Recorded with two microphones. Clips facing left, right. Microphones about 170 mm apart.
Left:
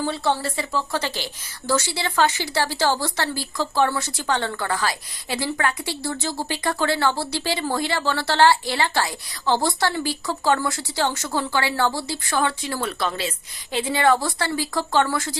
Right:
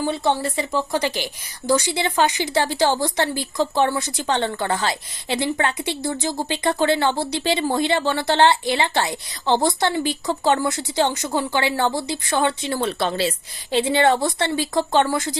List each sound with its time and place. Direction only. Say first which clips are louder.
0.0 s a woman's voice: right 2 dB; 15° right (ahead or behind)